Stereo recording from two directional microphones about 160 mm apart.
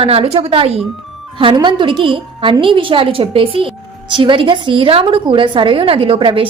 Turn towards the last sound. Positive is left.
turn(degrees=-35)  # may be behind; listen again after turning